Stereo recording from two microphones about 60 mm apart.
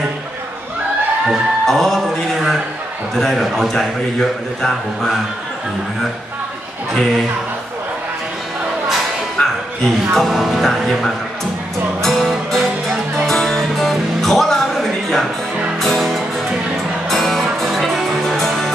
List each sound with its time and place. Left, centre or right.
1.7 s music: centre
3.2 s a man's voice: centre
9.4 s a sound: centre
10.1 s a man's voice: centre
12.0 s music: centre